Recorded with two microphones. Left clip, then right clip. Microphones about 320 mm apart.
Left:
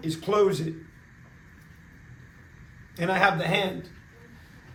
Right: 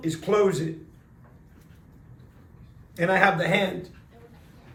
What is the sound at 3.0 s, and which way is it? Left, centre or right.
Speech, left.